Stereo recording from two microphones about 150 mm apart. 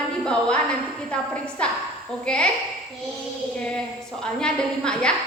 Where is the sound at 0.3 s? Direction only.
5° left (ahead or behind).